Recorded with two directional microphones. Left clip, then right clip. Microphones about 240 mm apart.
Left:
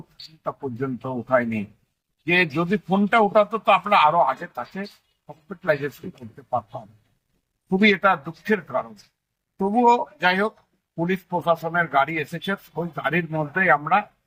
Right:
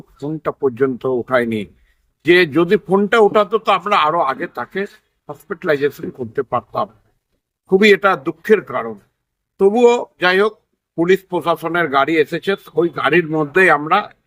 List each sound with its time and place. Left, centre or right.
0.4 s a man's voice: centre
7.8 s a man's voice: right